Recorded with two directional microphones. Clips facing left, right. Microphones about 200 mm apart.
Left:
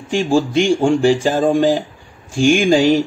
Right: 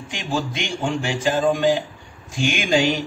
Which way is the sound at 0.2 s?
35° left (ahead or behind).